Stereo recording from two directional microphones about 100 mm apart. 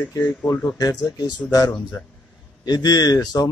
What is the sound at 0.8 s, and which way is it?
A man's voice, 40° left (ahead or behind).